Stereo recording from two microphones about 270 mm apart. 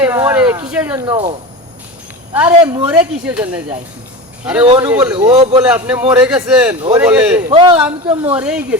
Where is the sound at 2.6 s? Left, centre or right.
Centre.